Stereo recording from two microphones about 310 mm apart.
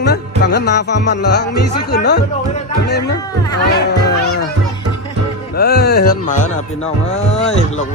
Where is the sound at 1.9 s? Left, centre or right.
Left.